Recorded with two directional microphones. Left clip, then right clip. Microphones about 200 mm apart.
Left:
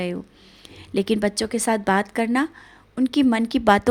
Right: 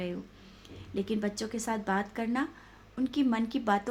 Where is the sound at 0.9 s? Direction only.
45° left (ahead or behind).